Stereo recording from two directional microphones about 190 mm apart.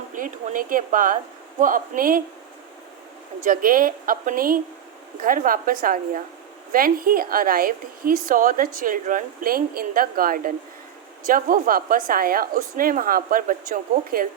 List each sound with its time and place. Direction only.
0.1 s a woman's voice: 45° right (ahead or behind)
3.4 s a woman's voice: 45° right (ahead or behind)